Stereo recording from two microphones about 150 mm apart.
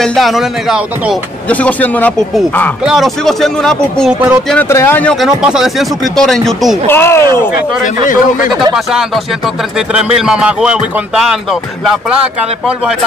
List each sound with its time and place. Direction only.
0.0 s speech: centre (ahead or behind)
1.5 s speech: 10° left (ahead or behind)
4.5 s speech: 15° left (ahead or behind)
5.1 s speech: 5° right (ahead or behind)
6.9 s speech: 15° left (ahead or behind)
7.8 s speech: 60° left (ahead or behind)
8.7 s speech: centre (ahead or behind)